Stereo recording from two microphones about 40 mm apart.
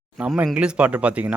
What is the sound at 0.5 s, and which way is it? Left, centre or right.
Speech, right.